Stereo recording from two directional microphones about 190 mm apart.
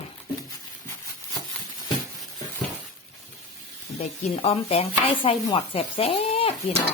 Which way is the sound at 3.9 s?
35° left (ahead or behind).